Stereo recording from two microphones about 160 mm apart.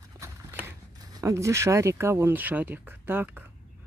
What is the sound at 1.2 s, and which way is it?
Speech, 20° right (ahead or behind).